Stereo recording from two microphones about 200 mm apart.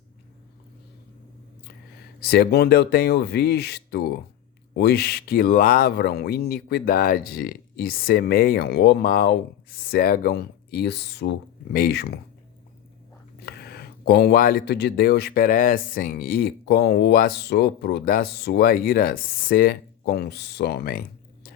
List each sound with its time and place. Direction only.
2.2 s speech: 50° left (ahead or behind)
13.4 s speech: 55° left (ahead or behind)